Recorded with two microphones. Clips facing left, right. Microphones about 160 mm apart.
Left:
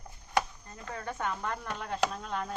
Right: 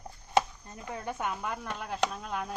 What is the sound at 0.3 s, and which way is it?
Speech, 20° right (ahead or behind).